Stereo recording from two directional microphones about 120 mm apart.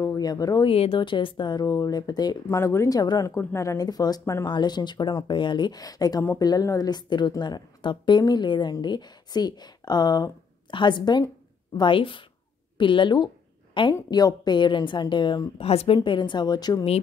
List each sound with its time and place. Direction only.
0.0 s speech: 30° left (ahead or behind)
0.7 s a woman's voice: 50° left (ahead or behind)
14.1 s a woman's voice: 35° left (ahead or behind)
15.5 s speech: 55° left (ahead or behind)
16.0 s a woman's voice: 40° left (ahead or behind)